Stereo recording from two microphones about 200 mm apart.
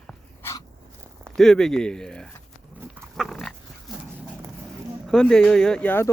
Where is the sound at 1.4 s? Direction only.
Centre (ahead or behind).